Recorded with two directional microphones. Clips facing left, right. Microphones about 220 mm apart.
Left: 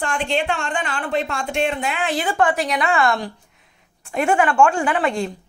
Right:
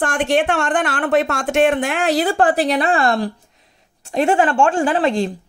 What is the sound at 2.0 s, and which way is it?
A woman's voice, 40° right (ahead or behind).